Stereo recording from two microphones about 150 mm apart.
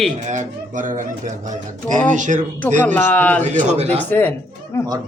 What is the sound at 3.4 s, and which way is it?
Speech, 50° right (ahead or behind).